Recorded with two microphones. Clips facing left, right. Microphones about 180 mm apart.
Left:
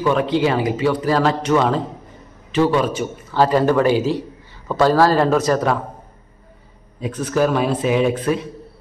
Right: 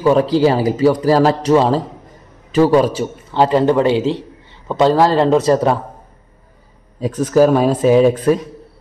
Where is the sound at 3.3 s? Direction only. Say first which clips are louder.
Right 2 dB; 25° right (ahead or behind).